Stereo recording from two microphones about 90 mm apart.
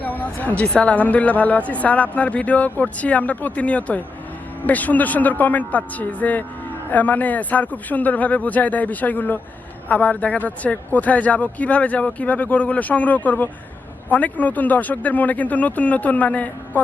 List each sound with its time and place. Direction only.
0.0 s speech: 20° left (ahead or behind)